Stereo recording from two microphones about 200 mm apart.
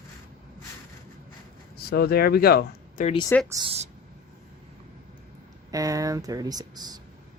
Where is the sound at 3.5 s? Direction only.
20° right (ahead or behind).